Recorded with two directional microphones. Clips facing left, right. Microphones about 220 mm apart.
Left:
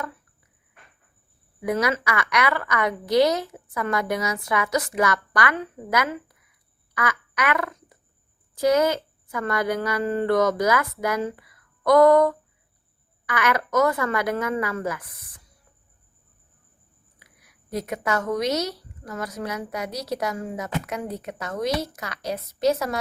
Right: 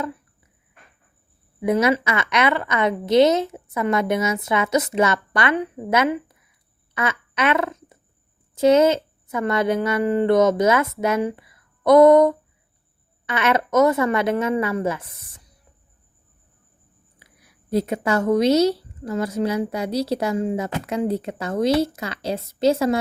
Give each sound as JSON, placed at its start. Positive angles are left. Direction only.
{"t": 1.6, "sound": "a woman's voice", "side_deg": -20}
{"t": 17.2, "sound": "a woman's voice", "side_deg": -30}